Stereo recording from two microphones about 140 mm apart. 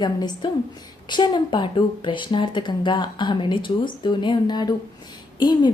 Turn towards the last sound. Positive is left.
turn(degrees=30)  # may be behind; listen again after turning